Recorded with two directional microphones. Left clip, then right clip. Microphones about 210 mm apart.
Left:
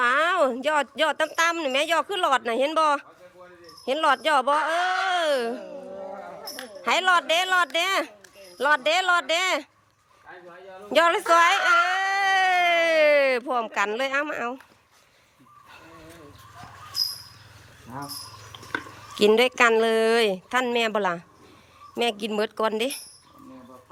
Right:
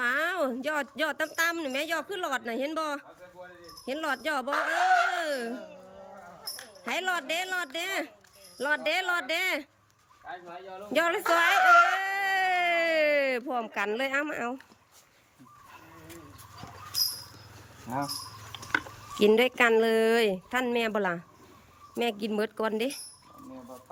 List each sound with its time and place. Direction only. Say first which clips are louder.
0.0 s a woman's voice: left 7 dB; 5° right (ahead or behind)
6.8 s a woman's voice: left 10 dB; 5° right (ahead or behind)
10.9 s speech: left 7 dB; 10° right (ahead or behind)
11.3 s a sound: left 3 dB; 10° right (ahead or behind)
17.9 s speech: right 5 dB; 30° right (ahead or behind)
19.1 s speech: left 4 dB; 10° right (ahead or behind)